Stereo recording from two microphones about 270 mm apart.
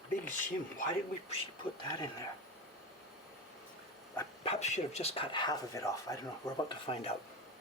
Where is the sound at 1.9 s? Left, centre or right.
Centre.